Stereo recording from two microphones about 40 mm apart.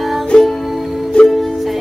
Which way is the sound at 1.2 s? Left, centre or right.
Centre.